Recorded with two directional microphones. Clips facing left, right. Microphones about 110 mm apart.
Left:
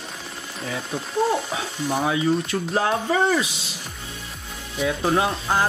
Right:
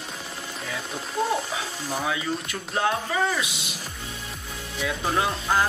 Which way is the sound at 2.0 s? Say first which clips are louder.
Left 7 dB; 30° left (ahead or behind).